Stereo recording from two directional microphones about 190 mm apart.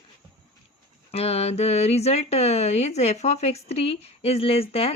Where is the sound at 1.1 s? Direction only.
35° left (ahead or behind).